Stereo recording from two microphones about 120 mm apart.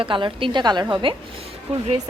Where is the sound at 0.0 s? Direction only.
45° right (ahead or behind).